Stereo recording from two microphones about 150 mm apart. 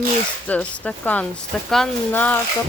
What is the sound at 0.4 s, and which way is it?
Speech, 10° left (ahead or behind).